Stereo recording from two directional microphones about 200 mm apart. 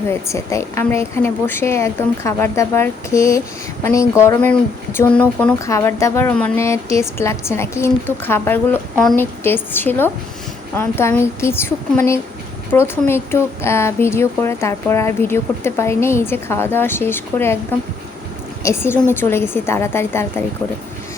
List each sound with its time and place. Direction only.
0.1 s speech: 15° left (ahead or behind)